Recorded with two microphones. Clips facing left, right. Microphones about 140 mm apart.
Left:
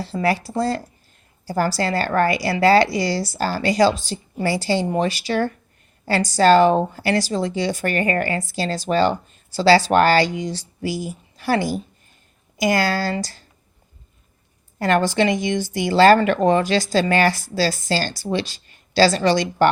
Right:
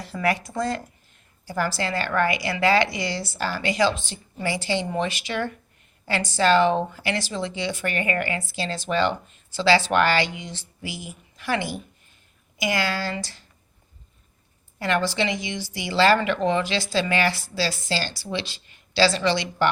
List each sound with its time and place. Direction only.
0.0 s speech: 30° left (ahead or behind)
14.8 s speech: 45° left (ahead or behind)